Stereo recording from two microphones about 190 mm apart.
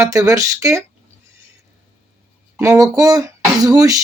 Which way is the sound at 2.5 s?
15° right (ahead or behind).